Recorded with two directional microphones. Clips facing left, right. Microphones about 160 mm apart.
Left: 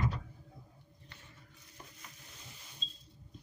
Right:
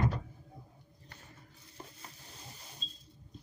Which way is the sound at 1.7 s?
35° right (ahead or behind).